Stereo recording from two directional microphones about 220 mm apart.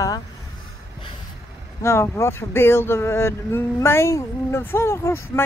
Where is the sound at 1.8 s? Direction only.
15° left (ahead or behind).